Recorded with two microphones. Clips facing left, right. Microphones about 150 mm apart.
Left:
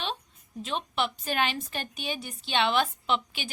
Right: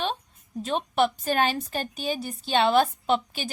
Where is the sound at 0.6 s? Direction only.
45° right (ahead or behind).